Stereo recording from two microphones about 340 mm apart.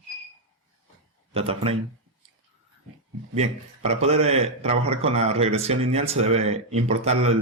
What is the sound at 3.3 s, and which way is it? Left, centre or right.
A man's voice, centre.